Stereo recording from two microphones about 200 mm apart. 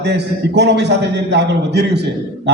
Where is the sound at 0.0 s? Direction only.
60° right (ahead or behind).